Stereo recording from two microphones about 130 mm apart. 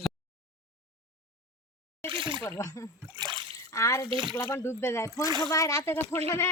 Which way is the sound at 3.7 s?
25° left (ahead or behind).